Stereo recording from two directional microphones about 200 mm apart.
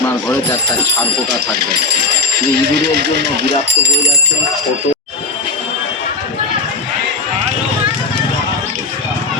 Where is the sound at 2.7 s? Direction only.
55° right (ahead or behind).